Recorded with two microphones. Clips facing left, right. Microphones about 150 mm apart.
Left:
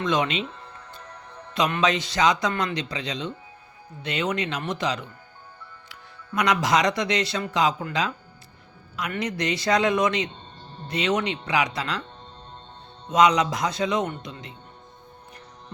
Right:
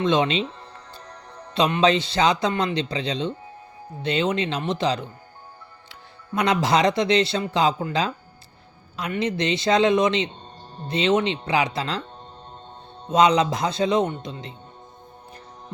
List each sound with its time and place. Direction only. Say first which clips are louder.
0.0 s a man's voice: right 4 dB; 25° right (ahead or behind)
1.5 s a man's voice: right 4 dB; 30° right (ahead or behind)
13.1 s a man's voice: right 2 dB; 30° right (ahead or behind)